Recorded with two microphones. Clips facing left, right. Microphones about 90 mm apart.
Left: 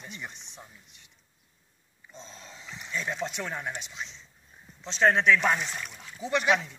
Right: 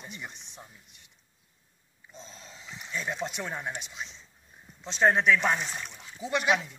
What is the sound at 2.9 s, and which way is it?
A man's voice, 10° right (ahead or behind).